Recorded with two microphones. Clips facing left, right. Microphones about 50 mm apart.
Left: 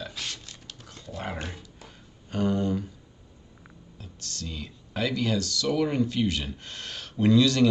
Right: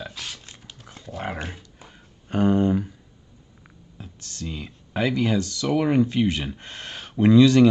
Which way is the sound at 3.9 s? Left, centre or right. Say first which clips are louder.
Right 3 dB; right.